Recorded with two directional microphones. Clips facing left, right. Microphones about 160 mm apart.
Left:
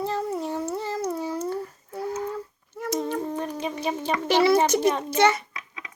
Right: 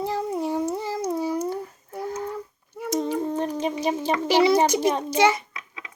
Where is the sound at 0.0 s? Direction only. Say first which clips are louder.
Right 1 dB; 15° right (ahead or behind).